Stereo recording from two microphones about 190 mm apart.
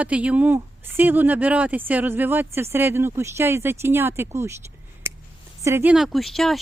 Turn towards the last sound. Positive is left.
turn(degrees=0)  # may be behind; listen again after turning